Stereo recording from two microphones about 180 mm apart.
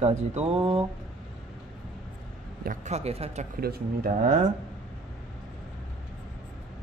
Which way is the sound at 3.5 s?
60° right (ahead or behind).